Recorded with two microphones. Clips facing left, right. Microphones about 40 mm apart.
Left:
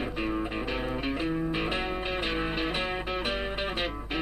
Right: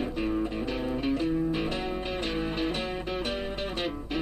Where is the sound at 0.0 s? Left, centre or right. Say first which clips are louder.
Right 2 dB; centre.